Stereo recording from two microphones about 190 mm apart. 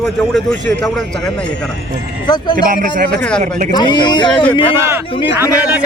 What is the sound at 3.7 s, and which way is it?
Speech, 20° left (ahead or behind).